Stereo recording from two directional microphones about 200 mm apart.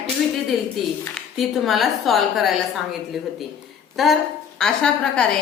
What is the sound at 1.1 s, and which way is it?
A woman's voice, centre (ahead or behind).